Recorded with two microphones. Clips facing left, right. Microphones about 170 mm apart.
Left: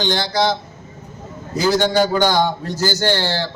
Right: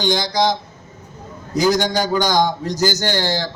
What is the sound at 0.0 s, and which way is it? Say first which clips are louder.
Speech: right 1 dB; 15° right (ahead or behind).